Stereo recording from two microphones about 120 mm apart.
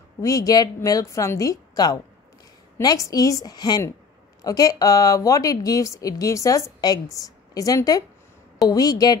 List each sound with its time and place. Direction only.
0.2 s a woman's voice: 30° left (ahead or behind)